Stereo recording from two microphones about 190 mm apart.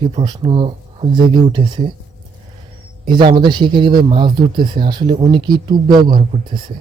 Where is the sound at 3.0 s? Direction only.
25° right (ahead or behind).